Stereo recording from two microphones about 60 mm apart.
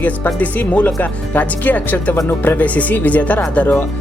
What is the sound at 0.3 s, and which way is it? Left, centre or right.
Speech, left.